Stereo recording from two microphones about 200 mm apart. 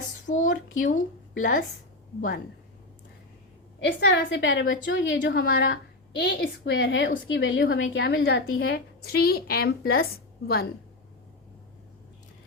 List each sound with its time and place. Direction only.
0.4 s speech: 70° left (ahead or behind)
0.9 s a woman's voice: 55° left (ahead or behind)
4.1 s a woman's voice: 60° left (ahead or behind)
5.3 s a woman's voice: 50° left (ahead or behind)
5.6 s a woman's voice: 65° left (ahead or behind); by 10.7 s 50° left (ahead or behind)